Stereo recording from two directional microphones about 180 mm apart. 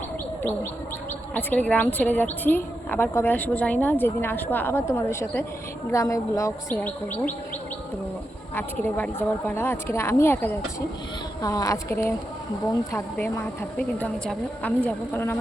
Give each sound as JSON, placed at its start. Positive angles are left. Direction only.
{"t": 1.3, "sound": "speech", "side_deg": 10}
{"t": 8.5, "sound": "a woman's voice", "side_deg": 10}